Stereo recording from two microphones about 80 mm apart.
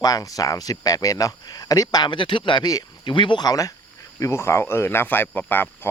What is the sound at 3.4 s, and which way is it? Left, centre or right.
Speech, left.